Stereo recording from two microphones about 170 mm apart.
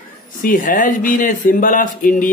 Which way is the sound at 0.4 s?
55° left (ahead or behind).